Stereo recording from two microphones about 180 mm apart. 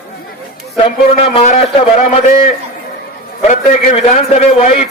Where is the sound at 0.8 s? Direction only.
35° left (ahead or behind).